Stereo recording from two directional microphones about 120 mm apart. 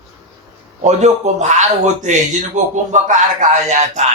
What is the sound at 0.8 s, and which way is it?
Speech, 75° right (ahead or behind).